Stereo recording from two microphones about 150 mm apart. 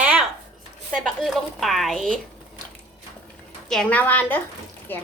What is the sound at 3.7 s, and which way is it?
A woman's voice, 5° left (ahead or behind).